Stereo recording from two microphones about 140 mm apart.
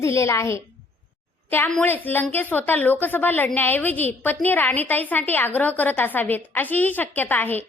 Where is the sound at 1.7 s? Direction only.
10° left (ahead or behind).